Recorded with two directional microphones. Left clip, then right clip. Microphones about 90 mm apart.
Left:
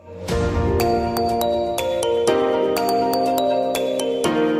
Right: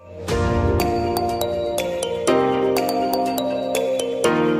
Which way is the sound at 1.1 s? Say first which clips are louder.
Left 2 dB; centre (ahead or behind).